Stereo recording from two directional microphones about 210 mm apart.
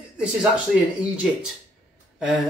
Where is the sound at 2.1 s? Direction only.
5° right (ahead or behind).